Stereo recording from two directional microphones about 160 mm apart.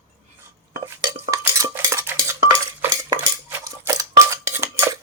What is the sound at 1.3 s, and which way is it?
Cutlery, 20° right (ahead or behind).